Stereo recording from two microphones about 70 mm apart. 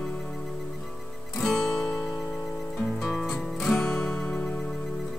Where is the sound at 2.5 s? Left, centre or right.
Left.